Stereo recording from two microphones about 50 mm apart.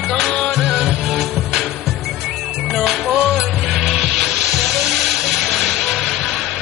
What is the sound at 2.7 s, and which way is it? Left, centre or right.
Music, centre.